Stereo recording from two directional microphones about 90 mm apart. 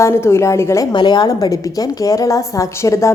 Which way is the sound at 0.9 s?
55° left (ahead or behind).